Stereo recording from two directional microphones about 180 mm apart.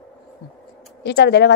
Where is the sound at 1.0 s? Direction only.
65° left (ahead or behind).